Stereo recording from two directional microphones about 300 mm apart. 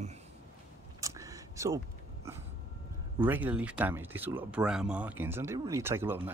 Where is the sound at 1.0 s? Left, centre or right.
Centre.